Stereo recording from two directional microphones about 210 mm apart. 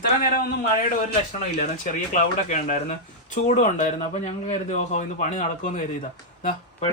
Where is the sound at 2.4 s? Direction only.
35° left (ahead or behind).